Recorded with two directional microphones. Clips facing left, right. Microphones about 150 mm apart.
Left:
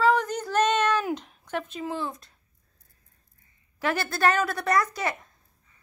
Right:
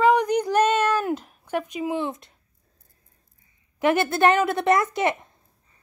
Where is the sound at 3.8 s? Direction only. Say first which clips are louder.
Right 6 dB; 20° right (ahead or behind).